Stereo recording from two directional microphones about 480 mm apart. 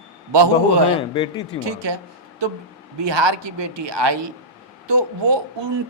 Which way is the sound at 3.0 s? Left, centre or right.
Right.